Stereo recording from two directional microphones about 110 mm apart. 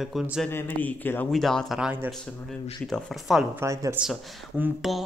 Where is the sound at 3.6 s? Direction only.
25° right (ahead or behind).